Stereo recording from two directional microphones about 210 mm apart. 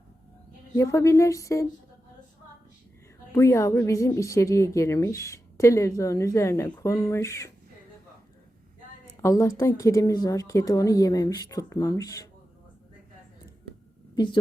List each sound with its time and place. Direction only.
0.8 s a woman's voice: 15° left (ahead or behind)
3.3 s a woman's voice: 15° left (ahead or behind)
9.2 s a woman's voice: 15° left (ahead or behind)